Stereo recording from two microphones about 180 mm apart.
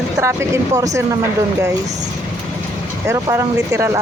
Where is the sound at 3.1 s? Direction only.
15° right (ahead or behind).